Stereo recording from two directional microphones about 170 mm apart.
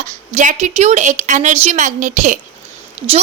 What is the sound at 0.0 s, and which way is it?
A woman's voice, 50° right (ahead or behind).